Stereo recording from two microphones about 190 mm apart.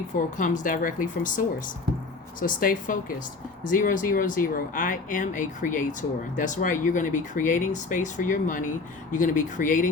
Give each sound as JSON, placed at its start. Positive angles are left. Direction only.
{"t": 0.1, "sound": "speech", "side_deg": 40}
{"t": 2.4, "sound": "speech", "side_deg": 45}